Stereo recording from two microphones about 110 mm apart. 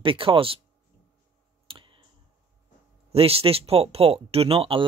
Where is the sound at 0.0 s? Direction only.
55° right (ahead or behind).